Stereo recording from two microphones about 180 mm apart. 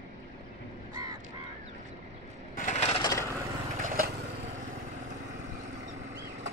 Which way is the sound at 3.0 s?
20° left (ahead or behind).